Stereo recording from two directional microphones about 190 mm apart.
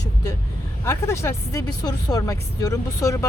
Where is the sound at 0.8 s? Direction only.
15° left (ahead or behind).